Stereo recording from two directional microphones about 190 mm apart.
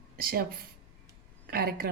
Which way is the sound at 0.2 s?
50° right (ahead or behind).